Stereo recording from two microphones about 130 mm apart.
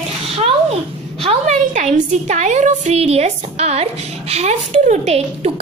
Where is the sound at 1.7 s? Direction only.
65° right (ahead or behind).